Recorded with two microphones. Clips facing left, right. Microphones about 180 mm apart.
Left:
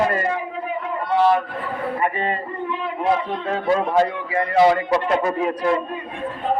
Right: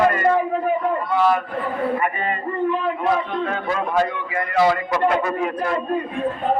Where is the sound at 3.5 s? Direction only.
30° left (ahead or behind).